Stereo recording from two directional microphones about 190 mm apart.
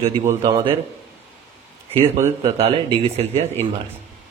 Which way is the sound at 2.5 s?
35° right (ahead or behind).